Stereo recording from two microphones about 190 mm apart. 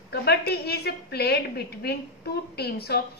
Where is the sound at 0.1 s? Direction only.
55° left (ahead or behind).